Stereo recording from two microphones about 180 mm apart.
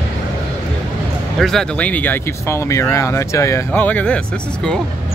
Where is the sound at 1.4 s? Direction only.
Centre (ahead or behind).